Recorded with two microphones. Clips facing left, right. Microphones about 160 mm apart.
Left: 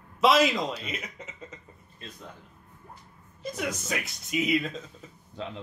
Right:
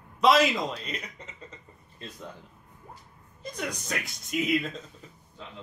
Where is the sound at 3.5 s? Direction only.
5° left (ahead or behind).